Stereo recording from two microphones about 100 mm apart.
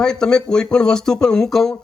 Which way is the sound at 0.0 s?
5° left (ahead or behind).